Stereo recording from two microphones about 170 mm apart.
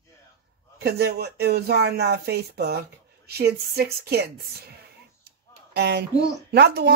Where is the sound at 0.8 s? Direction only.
70° right (ahead or behind).